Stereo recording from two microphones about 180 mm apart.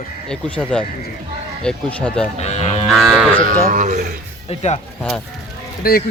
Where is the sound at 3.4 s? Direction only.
45° right (ahead or behind).